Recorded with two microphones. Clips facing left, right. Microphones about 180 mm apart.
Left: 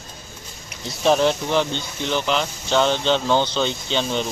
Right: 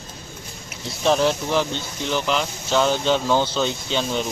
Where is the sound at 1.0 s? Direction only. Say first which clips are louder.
Left 1 dB; centre (ahead or behind).